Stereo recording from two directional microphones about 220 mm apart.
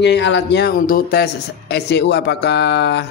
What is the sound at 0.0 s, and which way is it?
A man's voice, 55° left (ahead or behind).